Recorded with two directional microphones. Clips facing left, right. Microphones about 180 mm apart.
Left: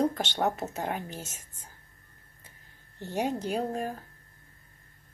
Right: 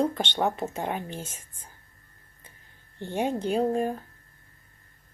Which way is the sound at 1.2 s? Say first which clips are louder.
Right 3 dB; 45° left (ahead or behind).